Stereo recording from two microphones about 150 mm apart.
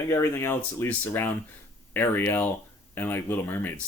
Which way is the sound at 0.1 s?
15° left (ahead or behind).